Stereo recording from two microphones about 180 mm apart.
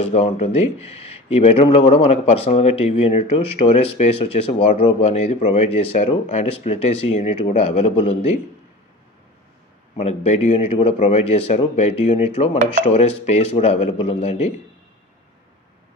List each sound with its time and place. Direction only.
0.0 s speech: 35° left (ahead or behind)
9.9 s speech: 35° left (ahead or behind)